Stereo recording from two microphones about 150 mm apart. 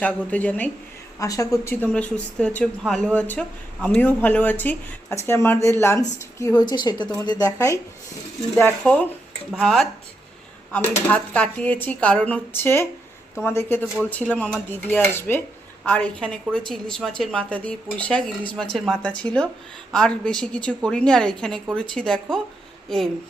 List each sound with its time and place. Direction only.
0.0 s speech: 10° left (ahead or behind)
1.2 s a woman's voice: 20° left (ahead or behind)
8.5 s a woman's voice: 10° left (ahead or behind)
11.1 s a woman's voice: 10° left (ahead or behind)